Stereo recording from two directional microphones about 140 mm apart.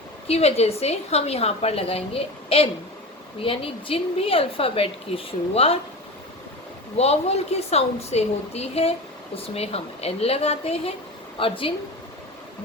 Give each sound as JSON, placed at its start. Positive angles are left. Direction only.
{"t": 0.3, "sound": "a woman's voice", "side_deg": 45}
{"t": 6.9, "sound": "a woman's voice", "side_deg": 50}